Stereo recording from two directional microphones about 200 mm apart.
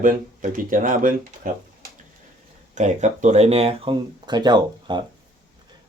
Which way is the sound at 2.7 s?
35° right (ahead or behind).